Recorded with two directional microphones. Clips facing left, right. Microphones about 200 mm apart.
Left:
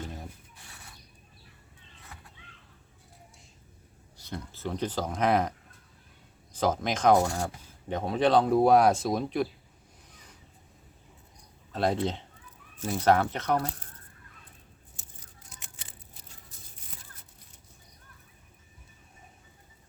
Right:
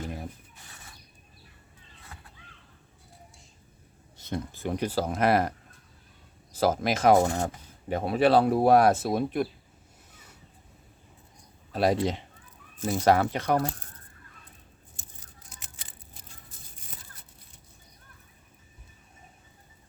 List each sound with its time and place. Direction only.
0.0 s a sound: 10° right (ahead or behind)
4.2 s speech: 20° right (ahead or behind)
11.7 s speech: 10° right (ahead or behind)
15.6 s vehicle: 40° right (ahead or behind)